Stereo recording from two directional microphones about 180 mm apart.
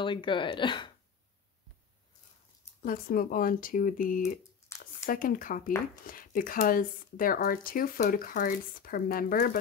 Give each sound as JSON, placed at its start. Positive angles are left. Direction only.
{"t": 0.0, "sound": "speech", "side_deg": 25}
{"t": 2.8, "sound": "speech", "side_deg": 50}